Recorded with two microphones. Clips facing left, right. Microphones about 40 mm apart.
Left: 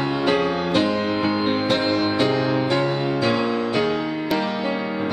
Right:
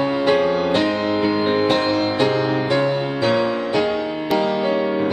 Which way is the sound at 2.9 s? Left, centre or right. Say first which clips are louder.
Right 2 dB; centre.